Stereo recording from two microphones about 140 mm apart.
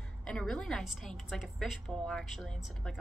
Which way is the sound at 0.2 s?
5° left (ahead or behind).